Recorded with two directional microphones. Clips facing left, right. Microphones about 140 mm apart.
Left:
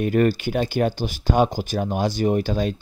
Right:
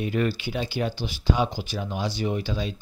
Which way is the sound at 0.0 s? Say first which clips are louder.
Left 6 dB; 50° left (ahead or behind).